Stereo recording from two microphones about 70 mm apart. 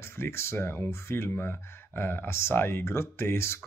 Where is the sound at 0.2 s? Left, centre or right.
Left.